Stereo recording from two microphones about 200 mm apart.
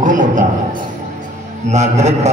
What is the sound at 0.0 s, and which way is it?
Speech, 40° right (ahead or behind).